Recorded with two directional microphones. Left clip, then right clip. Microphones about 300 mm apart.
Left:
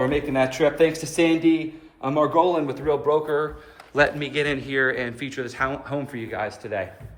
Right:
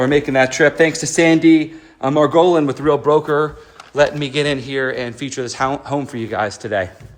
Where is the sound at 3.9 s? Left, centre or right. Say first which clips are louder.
Right 5 dB; centre.